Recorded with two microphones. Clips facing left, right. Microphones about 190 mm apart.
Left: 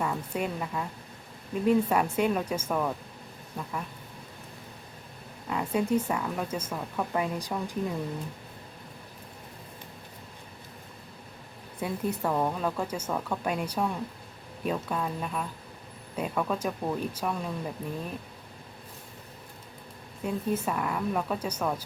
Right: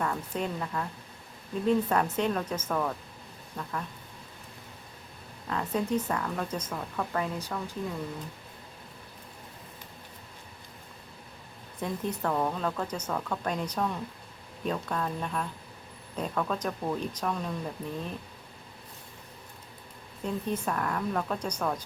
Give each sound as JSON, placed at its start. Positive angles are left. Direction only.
{"t": 0.0, "sound": "speech", "side_deg": 10}
{"t": 5.5, "sound": "speech", "side_deg": 10}
{"t": 11.8, "sound": "speech", "side_deg": 10}
{"t": 20.2, "sound": "speech", "side_deg": 5}